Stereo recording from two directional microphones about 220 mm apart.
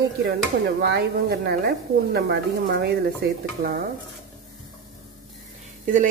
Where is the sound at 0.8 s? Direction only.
50° right (ahead or behind).